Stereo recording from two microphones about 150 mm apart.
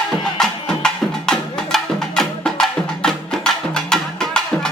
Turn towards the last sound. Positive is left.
turn(degrees=5)  # may be behind; listen again after turning